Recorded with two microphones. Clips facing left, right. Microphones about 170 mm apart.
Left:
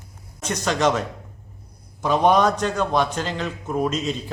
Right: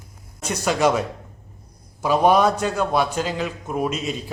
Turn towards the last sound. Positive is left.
turn(degrees=-10)  # may be behind; listen again after turning